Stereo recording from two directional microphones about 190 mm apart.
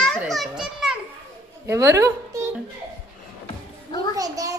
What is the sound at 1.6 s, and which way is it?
Speech, 15° right (ahead or behind).